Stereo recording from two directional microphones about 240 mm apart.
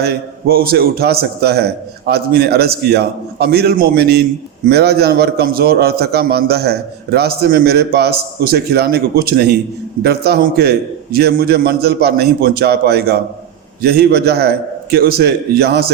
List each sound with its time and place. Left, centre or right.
0.0 s a man's voice: right